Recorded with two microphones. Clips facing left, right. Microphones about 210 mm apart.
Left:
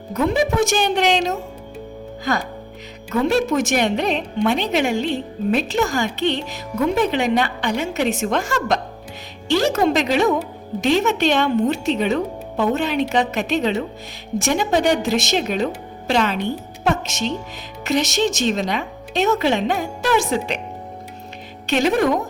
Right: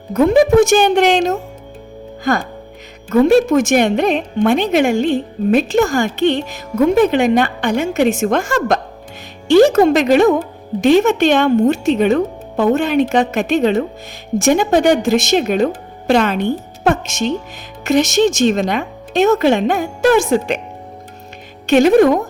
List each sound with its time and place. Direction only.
0.1 s a woman's voice: 50° right (ahead or behind)
21.7 s a woman's voice: 50° right (ahead or behind)